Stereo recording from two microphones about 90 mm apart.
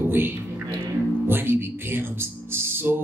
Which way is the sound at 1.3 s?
25° right (ahead or behind).